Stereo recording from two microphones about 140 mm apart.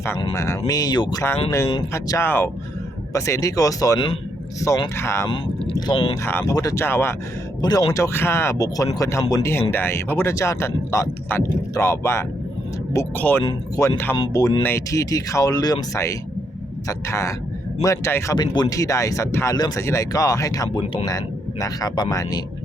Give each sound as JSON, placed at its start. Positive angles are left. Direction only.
{"t": 0.3, "sound": "speech", "side_deg": 20}
{"t": 1.2, "sound": "speech", "side_deg": 20}
{"t": 4.9, "sound": "speech", "side_deg": 20}
{"t": 5.7, "sound": "speech", "side_deg": 40}
{"t": 6.2, "sound": "speech", "side_deg": 15}
{"t": 18.3, "sound": "speech", "side_deg": 30}